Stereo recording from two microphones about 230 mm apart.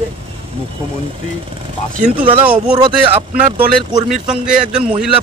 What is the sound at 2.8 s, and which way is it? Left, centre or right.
Speech, right.